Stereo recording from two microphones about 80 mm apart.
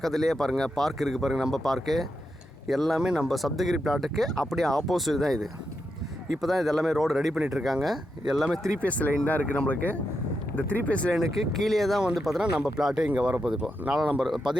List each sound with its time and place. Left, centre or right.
0.0 s speech: centre
8.8 s speech: centre
11.1 s speech: centre